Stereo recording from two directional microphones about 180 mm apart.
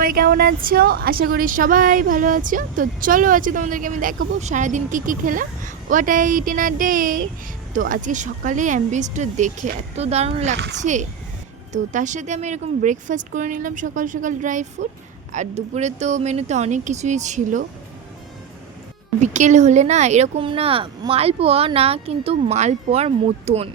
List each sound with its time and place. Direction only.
0.0 s a woman's voice: 55° right (ahead or behind)
19.2 s speech: 40° right (ahead or behind)